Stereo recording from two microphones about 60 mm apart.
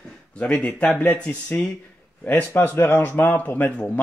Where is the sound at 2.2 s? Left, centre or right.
Left.